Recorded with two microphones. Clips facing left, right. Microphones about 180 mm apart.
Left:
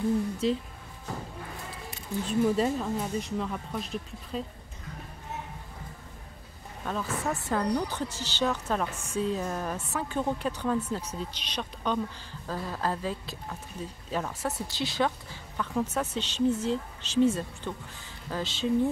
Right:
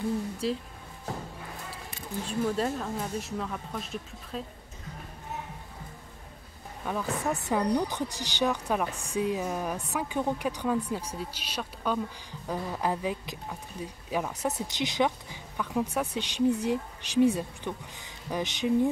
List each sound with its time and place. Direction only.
0.4 s speech: 5° right (ahead or behind)
2.2 s speech: centre (ahead or behind)
6.8 s speech: 10° right (ahead or behind)